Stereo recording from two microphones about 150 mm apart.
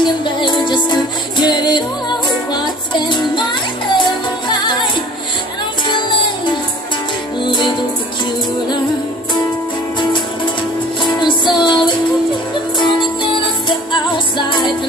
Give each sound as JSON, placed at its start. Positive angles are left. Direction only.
{"t": 0.0, "sound": "music", "side_deg": 30}
{"t": 11.0, "sound": "music", "side_deg": 30}